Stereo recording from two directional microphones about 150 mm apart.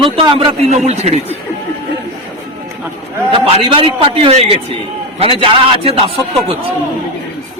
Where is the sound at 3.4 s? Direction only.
35° right (ahead or behind).